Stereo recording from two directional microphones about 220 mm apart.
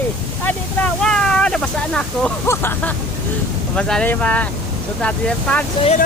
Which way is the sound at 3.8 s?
5° left (ahead or behind).